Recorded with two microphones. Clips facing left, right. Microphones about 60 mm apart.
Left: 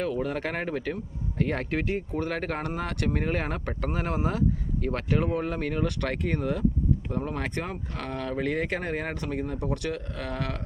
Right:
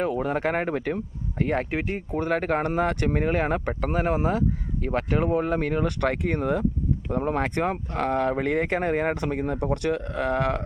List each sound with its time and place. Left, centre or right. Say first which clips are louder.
0.0 s speech: right 4 dB; right
1.4 s speech: right 3 dB; centre
2.6 s speech: right 7 dB; right